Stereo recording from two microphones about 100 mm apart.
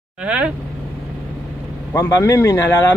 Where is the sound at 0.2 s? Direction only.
10° right (ahead or behind).